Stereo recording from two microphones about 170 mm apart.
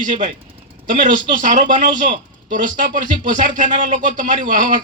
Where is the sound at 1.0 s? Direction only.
50° right (ahead or behind).